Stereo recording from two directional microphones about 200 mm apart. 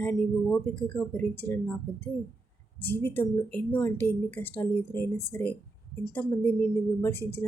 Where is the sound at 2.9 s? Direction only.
10° left (ahead or behind).